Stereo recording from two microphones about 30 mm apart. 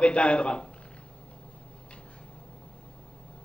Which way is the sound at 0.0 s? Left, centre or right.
Left.